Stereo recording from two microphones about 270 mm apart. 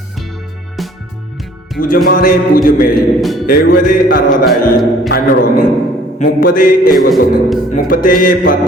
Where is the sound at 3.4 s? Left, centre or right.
Left.